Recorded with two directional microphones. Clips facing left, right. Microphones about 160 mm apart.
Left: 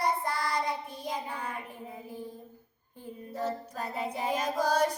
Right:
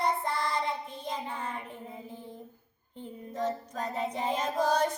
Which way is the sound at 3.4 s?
10° left (ahead or behind).